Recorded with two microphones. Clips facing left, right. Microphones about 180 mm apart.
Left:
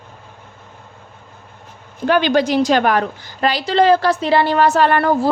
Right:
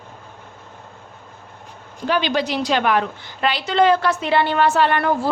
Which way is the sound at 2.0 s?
50° left (ahead or behind).